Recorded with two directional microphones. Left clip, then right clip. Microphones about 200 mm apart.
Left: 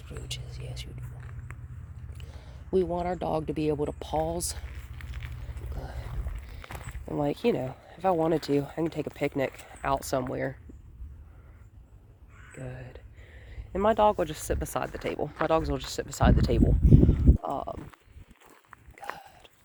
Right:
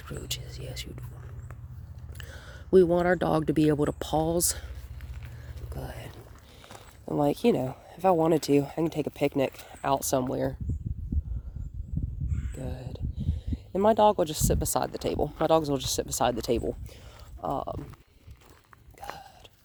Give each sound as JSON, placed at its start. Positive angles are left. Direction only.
{"t": 0.0, "sound": "vehicle", "side_deg": -55}
{"t": 2.1, "sound": "speech", "side_deg": -55}
{"t": 5.7, "sound": "boat", "side_deg": -50}
{"t": 6.6, "sound": "a sound", "side_deg": 35}
{"t": 7.0, "sound": "speech", "side_deg": -35}
{"t": 12.5, "sound": "a sound", "side_deg": -35}
{"t": 13.7, "sound": "speech", "side_deg": -35}